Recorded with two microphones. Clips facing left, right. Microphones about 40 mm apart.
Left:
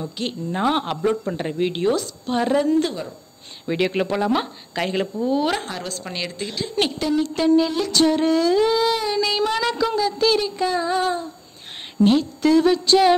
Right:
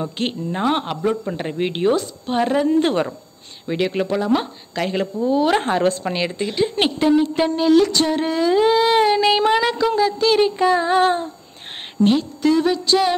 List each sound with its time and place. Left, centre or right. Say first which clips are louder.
0.0 s child singing: right 4 dB; right
0.6 s speech: even; centre
1.3 s speech: even; centre
2.9 s speech: right 10 dB; right
3.6 s speech: even; centre
5.6 s child singing: right 11 dB; right
6.0 s female singing: right 6 dB; centre
7.0 s speech: right 8 dB; right
7.9 s female singing: left 2 dB; centre
8.5 s speech: right 2 dB; right
8.9 s child singing: right 6 dB; right
9.6 s female singing: right 3 dB; centre
10.4 s child singing: right 6 dB; right
12.0 s speech: even; centre